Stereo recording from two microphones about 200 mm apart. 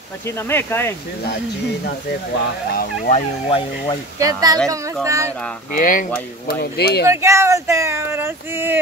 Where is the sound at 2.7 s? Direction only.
50° left (ahead or behind).